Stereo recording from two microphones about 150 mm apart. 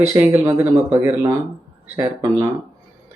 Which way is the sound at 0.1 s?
15° right (ahead or behind).